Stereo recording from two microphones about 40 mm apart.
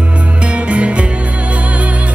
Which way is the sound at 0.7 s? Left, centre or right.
Right.